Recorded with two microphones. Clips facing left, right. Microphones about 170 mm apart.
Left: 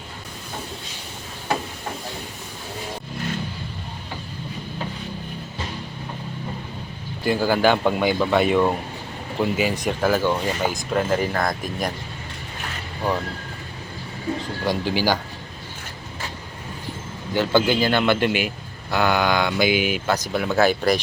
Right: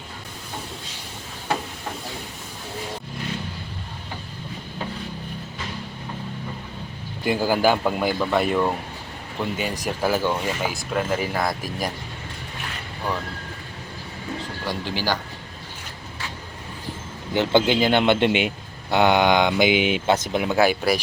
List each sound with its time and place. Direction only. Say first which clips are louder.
7.3 s speech: left 1 dB; 10° right (ahead or behind)
14.7 s speech: left 4 dB; 10° left (ahead or behind)
17.3 s a man's voice: even; 20° right (ahead or behind)